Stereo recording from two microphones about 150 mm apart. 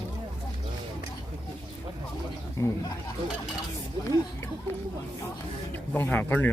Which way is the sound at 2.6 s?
20° left (ahead or behind).